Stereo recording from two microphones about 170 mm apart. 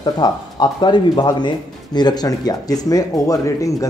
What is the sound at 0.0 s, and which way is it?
Speech, 25° left (ahead or behind).